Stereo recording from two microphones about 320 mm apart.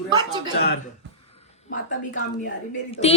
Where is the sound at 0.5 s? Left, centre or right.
Left.